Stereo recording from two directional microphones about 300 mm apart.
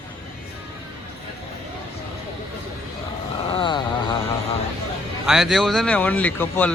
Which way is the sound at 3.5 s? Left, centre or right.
Centre.